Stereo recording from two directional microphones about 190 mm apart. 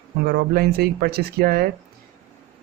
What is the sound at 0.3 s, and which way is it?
Speech, 55° right (ahead or behind).